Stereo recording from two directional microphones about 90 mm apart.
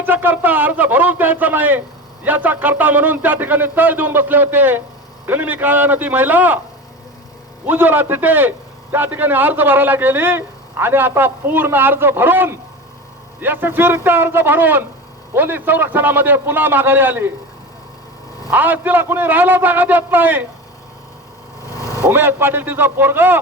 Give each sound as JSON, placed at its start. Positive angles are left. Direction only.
{"t": 0.0, "sound": "a man's voice", "side_deg": -20}
{"t": 7.7, "sound": "a man's voice", "side_deg": -20}
{"t": 18.5, "sound": "a man's voice", "side_deg": -20}
{"t": 22.1, "sound": "a man's voice", "side_deg": -25}